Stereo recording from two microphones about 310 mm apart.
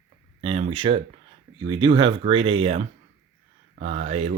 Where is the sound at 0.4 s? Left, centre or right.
Centre.